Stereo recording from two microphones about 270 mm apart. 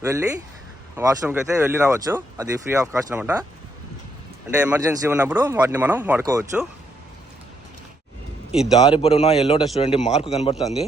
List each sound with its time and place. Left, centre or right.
0.0 s speech: centre
4.5 s speech: centre
8.8 s a man's voice: centre